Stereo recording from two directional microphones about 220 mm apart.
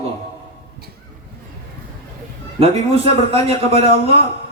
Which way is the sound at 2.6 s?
25° right (ahead or behind).